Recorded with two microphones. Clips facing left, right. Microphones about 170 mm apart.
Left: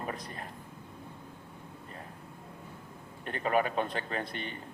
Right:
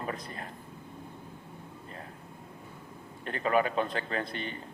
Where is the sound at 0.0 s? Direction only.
35° right (ahead or behind).